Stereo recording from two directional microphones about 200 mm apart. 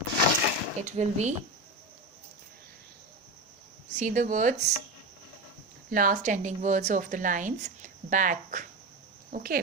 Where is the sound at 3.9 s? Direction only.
40° right (ahead or behind).